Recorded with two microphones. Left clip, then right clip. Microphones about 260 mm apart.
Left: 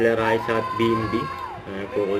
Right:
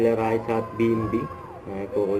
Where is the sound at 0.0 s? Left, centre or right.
Centre.